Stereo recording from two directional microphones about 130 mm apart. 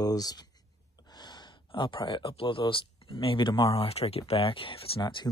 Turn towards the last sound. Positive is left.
turn(degrees=40)  # may be behind; listen again after turning